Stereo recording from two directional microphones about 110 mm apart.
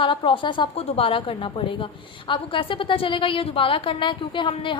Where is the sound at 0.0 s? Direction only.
50° left (ahead or behind).